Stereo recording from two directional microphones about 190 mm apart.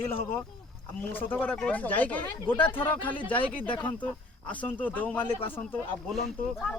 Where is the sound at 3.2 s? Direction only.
25° left (ahead or behind).